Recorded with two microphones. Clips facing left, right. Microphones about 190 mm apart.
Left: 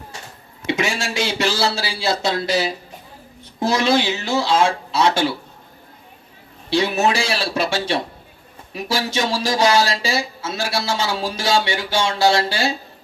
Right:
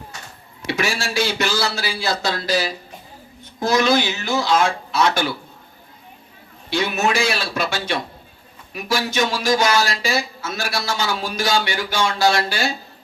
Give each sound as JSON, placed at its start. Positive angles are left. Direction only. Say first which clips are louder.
{"t": 0.7, "sound": "speech", "louder": "left 1 dB", "side_deg": 20}
{"t": 6.7, "sound": "a man's voice", "louder": "left 3 dB", "side_deg": 30}